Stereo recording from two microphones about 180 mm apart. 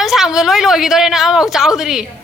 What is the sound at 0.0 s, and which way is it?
Speech, centre (ahead or behind).